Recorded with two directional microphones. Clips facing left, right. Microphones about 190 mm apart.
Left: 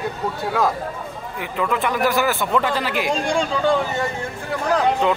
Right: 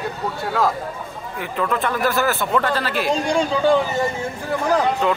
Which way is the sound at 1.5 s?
15° left (ahead or behind).